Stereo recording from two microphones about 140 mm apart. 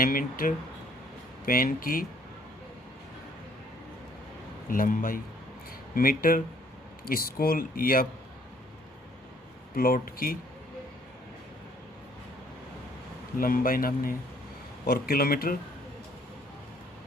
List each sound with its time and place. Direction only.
0.0 s speech: 90° left
4.7 s speech: 75° left (ahead or behind)
5.9 s speech: 90° left
9.7 s speech: 90° left
13.4 s speech: 90° left